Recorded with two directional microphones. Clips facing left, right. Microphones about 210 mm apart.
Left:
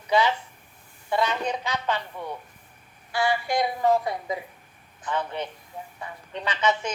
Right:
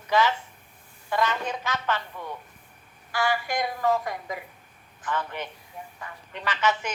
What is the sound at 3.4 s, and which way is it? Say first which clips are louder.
Speech: left 3 dB; 15° left (ahead or behind).